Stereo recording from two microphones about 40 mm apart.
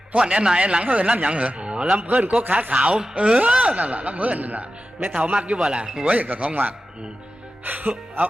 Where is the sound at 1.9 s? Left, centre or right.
Right.